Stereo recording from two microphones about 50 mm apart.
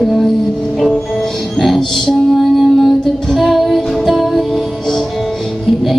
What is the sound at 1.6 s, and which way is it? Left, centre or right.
Music, centre.